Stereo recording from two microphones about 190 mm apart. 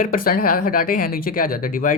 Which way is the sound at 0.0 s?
50° left (ahead or behind).